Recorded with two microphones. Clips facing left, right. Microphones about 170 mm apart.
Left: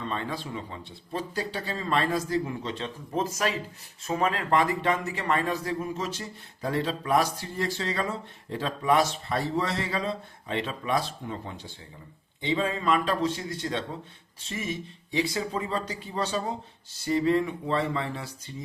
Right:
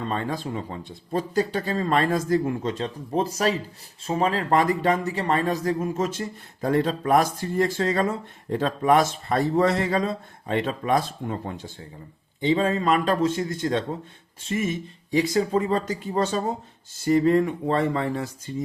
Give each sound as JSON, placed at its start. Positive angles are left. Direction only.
{"t": 0.1, "sound": "speech", "side_deg": -45}
{"t": 3.2, "sound": "speech", "side_deg": -35}
{"t": 15.1, "sound": "speech", "side_deg": -45}